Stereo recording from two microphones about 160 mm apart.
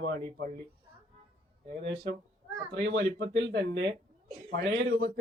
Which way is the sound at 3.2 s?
90° right.